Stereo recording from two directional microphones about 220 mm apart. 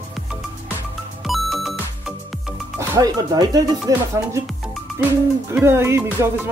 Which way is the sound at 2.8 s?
15° right (ahead or behind).